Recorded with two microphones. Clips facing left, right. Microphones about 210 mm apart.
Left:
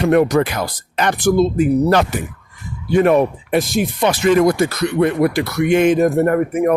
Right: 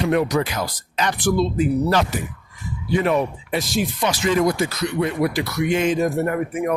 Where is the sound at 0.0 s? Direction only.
55° left (ahead or behind).